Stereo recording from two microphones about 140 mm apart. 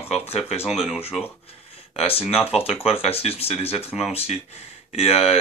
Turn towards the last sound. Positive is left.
turn(degrees=45)  # may be behind; listen again after turning